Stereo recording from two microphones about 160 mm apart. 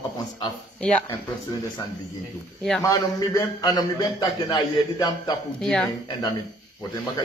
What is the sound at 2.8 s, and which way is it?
A man's voice, 20° left (ahead or behind).